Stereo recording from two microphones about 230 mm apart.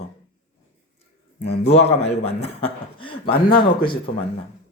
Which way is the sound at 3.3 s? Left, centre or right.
Left.